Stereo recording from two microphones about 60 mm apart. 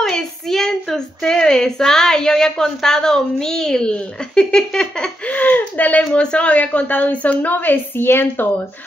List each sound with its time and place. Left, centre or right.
0.1 s a woman's voice: centre
5.3 s a woman's voice: left